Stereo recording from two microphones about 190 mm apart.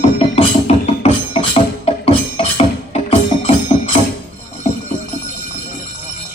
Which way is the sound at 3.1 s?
35° left (ahead or behind).